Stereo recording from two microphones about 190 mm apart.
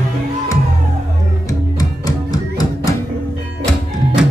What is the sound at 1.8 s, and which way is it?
Music, 20° left (ahead or behind).